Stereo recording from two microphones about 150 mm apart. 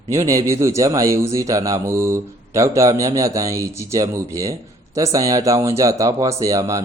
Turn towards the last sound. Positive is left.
turn(degrees=-20)  # may be behind; listen again after turning